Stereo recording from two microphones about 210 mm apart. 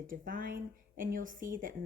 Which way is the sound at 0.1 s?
40° right (ahead or behind).